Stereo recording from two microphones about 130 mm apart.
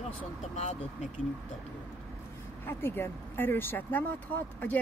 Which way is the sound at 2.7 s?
15° left (ahead or behind).